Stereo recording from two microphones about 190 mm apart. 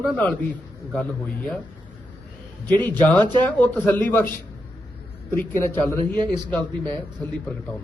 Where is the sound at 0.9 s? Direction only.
5° left (ahead or behind).